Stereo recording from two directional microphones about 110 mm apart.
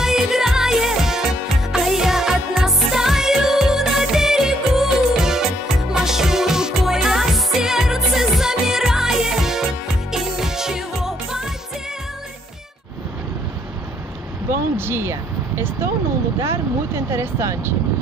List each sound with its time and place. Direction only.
0.0 s music: 5° right (ahead or behind)
14.8 s a sound: 20° right (ahead or behind)
16.3 s vehicle: 25° right (ahead or behind)